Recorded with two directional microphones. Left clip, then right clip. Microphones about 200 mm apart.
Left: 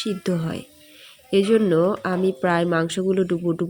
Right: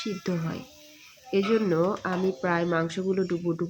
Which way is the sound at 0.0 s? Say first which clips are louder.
Left 6 dB; 20° left (ahead or behind).